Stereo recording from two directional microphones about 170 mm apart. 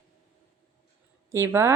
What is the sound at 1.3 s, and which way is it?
Speech, 15° right (ahead or behind).